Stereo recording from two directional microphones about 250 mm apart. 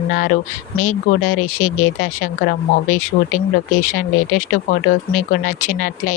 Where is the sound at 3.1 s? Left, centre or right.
Left.